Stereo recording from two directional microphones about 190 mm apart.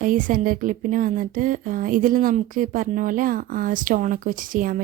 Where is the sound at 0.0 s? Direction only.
45° right (ahead or behind).